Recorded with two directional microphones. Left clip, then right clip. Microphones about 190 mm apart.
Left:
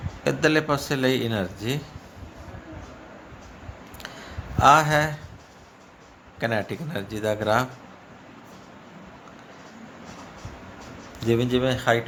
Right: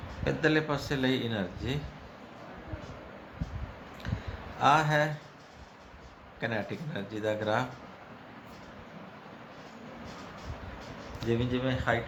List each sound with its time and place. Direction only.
0.3 s speech: 45° left (ahead or behind)
4.6 s speech: 45° left (ahead or behind)
6.4 s speech: 45° left (ahead or behind)
11.3 s speech: 55° left (ahead or behind)